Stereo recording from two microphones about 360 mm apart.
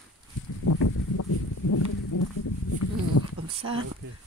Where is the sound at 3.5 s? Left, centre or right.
Centre.